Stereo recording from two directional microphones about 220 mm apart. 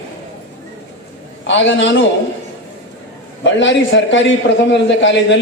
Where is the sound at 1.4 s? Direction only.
55° left (ahead or behind).